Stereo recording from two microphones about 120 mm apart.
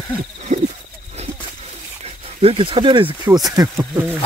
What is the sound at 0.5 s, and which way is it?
Hoot, 90° right.